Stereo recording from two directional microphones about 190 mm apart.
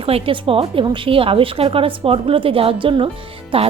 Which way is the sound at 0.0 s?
30° right (ahead or behind).